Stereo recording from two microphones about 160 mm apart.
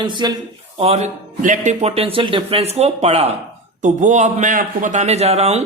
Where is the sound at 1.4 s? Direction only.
50° right (ahead or behind).